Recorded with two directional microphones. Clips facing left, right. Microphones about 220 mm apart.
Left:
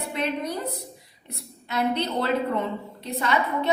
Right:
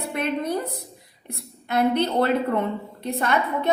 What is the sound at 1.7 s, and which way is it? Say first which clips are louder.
A woman's voice: right 4 dB; 55° right (ahead or behind).